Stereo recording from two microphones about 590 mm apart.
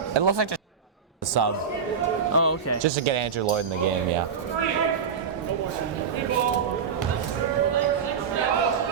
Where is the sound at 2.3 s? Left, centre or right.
Left.